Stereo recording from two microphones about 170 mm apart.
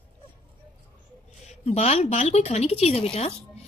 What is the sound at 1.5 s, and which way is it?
A woman's voice, 40° left (ahead or behind).